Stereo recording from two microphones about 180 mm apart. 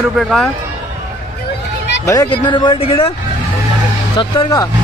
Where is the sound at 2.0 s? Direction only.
20° left (ahead or behind).